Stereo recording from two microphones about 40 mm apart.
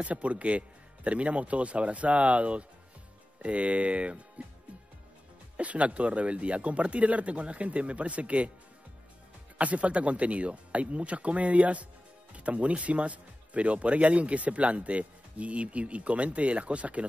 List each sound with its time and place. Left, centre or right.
0.0 s speech: right
5.6 s speech: right
9.6 s speech: right